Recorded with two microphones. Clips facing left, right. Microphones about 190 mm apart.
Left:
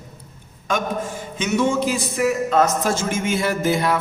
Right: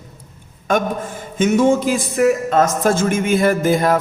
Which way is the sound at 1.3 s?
50° right (ahead or behind).